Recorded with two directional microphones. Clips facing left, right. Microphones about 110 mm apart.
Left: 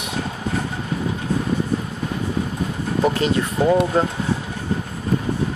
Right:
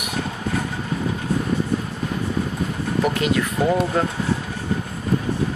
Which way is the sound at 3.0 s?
30° left (ahead or behind).